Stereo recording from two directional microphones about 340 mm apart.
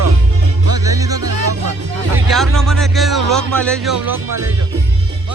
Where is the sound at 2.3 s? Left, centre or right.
Centre.